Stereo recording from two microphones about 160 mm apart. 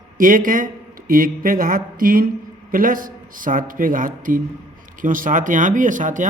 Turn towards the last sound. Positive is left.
turn(degrees=-55)  # may be behind; listen again after turning